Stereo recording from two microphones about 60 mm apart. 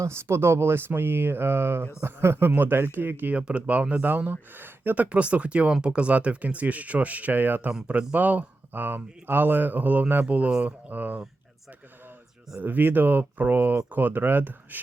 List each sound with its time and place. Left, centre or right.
0.0 s speech: right
3.3 s speech: right
4.0 s speech: right
5.0 s speech: right
12.5 s speech: right